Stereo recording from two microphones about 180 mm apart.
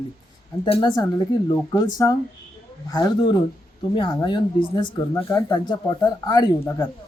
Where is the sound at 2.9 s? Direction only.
20° left (ahead or behind).